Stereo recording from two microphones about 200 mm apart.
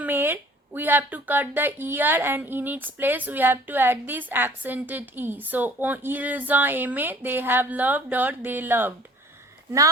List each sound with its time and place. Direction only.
0.0 s speech: 10° right (ahead or behind)